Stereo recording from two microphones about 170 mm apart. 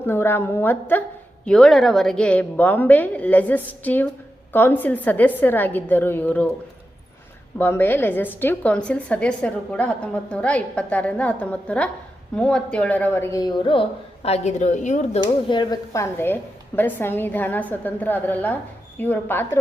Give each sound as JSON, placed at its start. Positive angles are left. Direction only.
{"t": 0.0, "sound": "a woman's voice", "side_deg": 10}
{"t": 7.6, "sound": "a woman's voice", "side_deg": 10}
{"t": 15.2, "sound": "a woman's voice", "side_deg": 25}